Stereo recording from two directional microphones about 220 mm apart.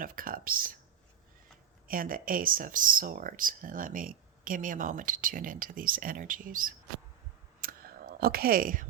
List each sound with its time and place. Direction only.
0.0 s speech: 40° right (ahead or behind)
1.9 s speech: 40° right (ahead or behind)
7.6 s a sound: 40° right (ahead or behind)